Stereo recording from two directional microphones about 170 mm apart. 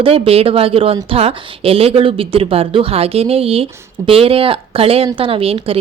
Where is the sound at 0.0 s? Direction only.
35° right (ahead or behind).